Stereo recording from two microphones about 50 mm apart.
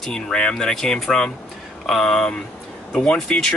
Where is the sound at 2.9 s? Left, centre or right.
Left.